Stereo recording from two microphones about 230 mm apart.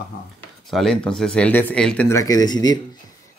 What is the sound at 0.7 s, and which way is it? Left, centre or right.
Speech, centre.